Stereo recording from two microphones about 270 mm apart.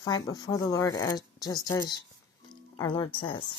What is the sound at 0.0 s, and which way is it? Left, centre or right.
Speech, centre.